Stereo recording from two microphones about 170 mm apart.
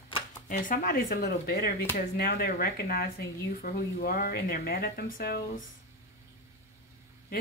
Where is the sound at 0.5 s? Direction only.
55° left (ahead or behind).